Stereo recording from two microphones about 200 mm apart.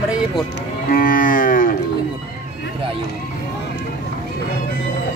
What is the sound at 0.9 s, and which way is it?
Moo, 45° left (ahead or behind).